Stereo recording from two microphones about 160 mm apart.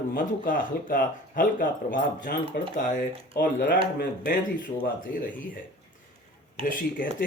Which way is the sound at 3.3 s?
75° left (ahead or behind).